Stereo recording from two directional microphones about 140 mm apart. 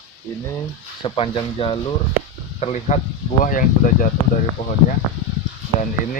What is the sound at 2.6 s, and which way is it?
Speech, 55° left (ahead or behind).